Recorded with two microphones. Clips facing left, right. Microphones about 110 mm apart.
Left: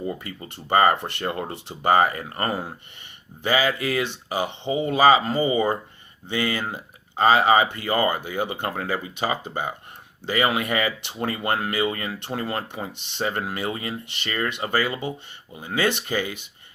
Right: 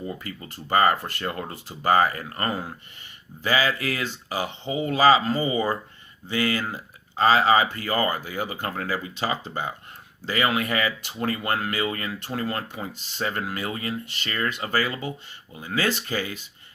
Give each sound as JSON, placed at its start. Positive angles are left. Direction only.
{"t": 0.0, "sound": "speech", "side_deg": 25}
{"t": 3.4, "sound": "speech", "side_deg": 20}
{"t": 9.0, "sound": "speech", "side_deg": 15}
{"t": 12.8, "sound": "speech", "side_deg": 70}
{"t": 13.1, "sound": "speech", "side_deg": 25}